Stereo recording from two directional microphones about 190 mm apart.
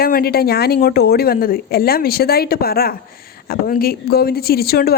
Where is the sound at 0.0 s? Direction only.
55° left (ahead or behind).